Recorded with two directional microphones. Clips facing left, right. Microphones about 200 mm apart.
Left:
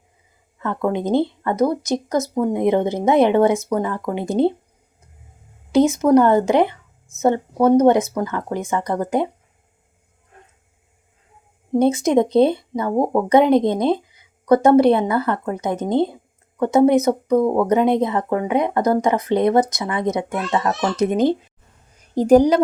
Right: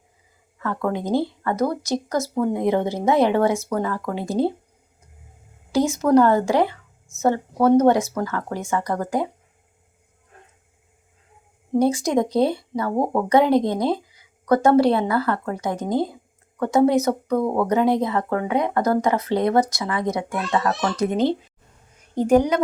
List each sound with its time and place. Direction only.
0.6 s speech: 20° left (ahead or behind)
5.7 s speech: 20° left (ahead or behind)
11.7 s speech: 20° left (ahead or behind)
22.1 s a woman's voice: 35° left (ahead or behind)